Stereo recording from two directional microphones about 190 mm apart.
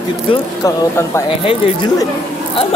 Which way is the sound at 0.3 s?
15° left (ahead or behind).